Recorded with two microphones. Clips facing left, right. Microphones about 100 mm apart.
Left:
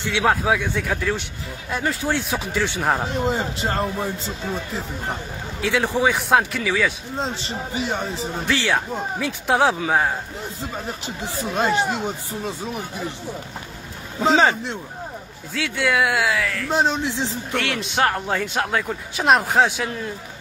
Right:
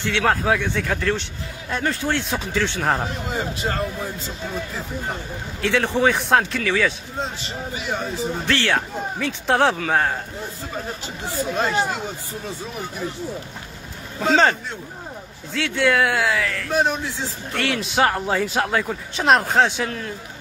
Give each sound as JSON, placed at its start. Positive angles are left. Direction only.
{"t": 0.2, "sound": "a man's voice", "side_deg": 5}
{"t": 3.3, "sound": "speech", "side_deg": 25}
{"t": 5.6, "sound": "speech", "side_deg": 5}
{"t": 7.2, "sound": "speech", "side_deg": 30}
{"t": 8.5, "sound": "speech", "side_deg": 10}
{"t": 11.5, "sound": "speech", "side_deg": 20}
{"t": 14.2, "sound": "speech", "side_deg": 15}
{"t": 15.5, "sound": "speech", "side_deg": 0}
{"t": 16.7, "sound": "speech", "side_deg": 20}
{"t": 17.6, "sound": "speech", "side_deg": 0}